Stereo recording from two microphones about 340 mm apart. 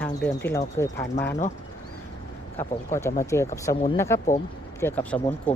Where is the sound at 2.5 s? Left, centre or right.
Centre.